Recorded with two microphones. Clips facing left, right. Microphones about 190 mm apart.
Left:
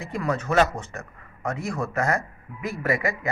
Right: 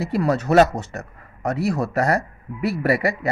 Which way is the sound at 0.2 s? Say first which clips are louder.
Right 6 dB; 40° right (ahead or behind).